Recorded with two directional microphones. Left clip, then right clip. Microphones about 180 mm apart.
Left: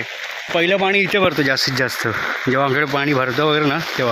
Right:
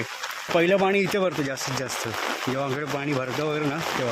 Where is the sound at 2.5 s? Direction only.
10° left (ahead or behind).